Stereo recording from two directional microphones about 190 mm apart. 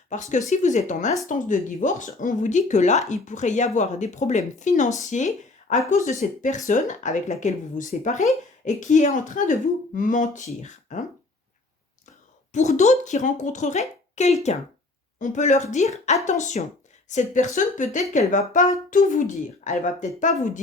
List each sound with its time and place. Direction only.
0.1 s speech: 40° left (ahead or behind)
12.5 s speech: 40° left (ahead or behind)